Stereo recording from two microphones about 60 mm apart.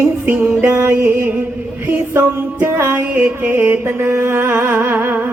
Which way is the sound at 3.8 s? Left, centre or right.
Right.